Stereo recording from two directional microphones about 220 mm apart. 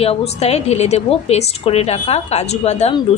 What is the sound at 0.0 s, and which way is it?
A woman's voice, 30° left (ahead or behind).